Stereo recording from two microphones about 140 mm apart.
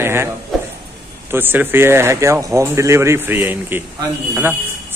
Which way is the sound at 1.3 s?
15° right (ahead or behind).